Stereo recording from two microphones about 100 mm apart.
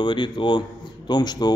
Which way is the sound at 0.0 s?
50° left (ahead or behind).